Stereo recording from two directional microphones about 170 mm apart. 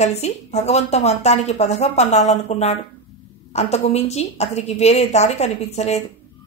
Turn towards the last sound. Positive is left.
turn(degrees=40)  # may be behind; listen again after turning